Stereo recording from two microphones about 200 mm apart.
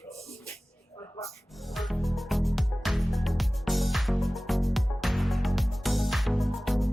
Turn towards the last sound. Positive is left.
turn(degrees=0)  # may be behind; listen again after turning